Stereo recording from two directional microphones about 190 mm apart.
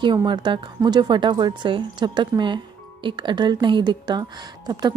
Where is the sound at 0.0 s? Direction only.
25° right (ahead or behind).